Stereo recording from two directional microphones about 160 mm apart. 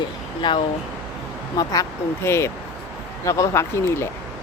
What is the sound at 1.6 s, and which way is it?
Speech, 25° left (ahead or behind).